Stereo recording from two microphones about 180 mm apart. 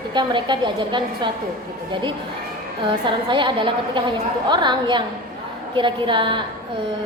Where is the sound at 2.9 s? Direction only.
25° right (ahead or behind).